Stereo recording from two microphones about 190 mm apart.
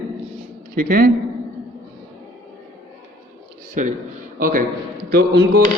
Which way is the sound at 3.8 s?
40° right (ahead or behind).